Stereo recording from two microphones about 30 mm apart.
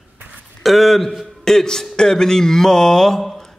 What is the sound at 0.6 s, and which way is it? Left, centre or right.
Speech, centre.